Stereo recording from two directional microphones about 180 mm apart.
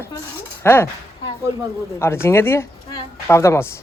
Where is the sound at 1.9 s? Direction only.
15° left (ahead or behind).